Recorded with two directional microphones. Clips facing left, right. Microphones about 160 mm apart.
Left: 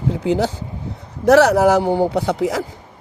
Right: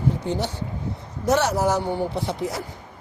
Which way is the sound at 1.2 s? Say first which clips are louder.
Left 9 dB; 70° left (ahead or behind).